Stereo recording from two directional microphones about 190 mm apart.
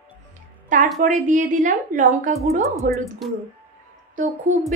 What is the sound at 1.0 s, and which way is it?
A woman's voice, 40° right (ahead or behind).